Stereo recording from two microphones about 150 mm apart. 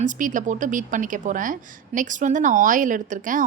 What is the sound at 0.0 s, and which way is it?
Speech, 60° right (ahead or behind).